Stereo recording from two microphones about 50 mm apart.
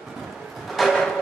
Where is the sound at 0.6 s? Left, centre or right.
Centre.